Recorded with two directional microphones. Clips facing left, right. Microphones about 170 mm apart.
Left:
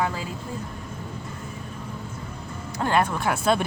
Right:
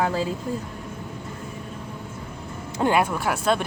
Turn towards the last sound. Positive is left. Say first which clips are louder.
# even
turn(degrees=0)  # may be behind; listen again after turning